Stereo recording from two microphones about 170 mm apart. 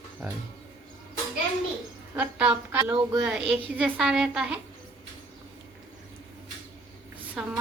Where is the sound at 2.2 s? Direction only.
10° right (ahead or behind).